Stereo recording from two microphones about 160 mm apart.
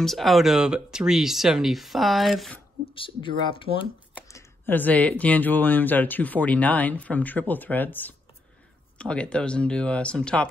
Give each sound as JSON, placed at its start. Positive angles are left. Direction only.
{"t": 0.0, "sound": "speech", "side_deg": 0}
{"t": 2.9, "sound": "speech", "side_deg": 35}
{"t": 4.3, "sound": "speech", "side_deg": 15}